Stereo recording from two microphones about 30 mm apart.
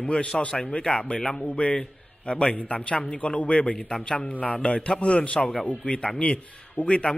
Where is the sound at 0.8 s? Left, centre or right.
Left.